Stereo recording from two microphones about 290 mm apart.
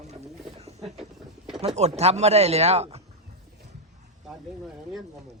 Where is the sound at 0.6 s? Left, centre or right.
Right.